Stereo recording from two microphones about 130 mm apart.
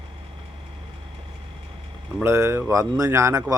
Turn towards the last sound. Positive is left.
turn(degrees=-25)  # may be behind; listen again after turning